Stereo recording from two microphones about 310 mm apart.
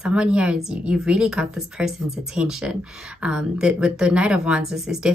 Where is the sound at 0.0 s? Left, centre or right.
Centre.